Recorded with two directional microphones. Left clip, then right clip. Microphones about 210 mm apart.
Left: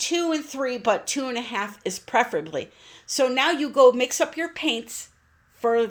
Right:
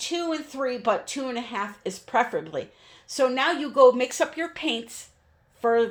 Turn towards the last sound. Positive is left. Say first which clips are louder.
# even
turn(degrees=25)  # may be behind; listen again after turning